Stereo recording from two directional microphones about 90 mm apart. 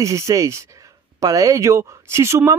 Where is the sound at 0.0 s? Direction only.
35° right (ahead or behind).